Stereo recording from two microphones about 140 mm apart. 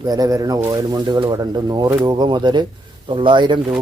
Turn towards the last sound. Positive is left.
turn(degrees=-35)  # may be behind; listen again after turning